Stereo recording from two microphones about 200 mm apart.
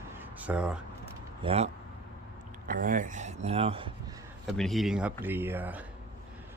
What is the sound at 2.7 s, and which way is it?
Speech, 45° right (ahead or behind).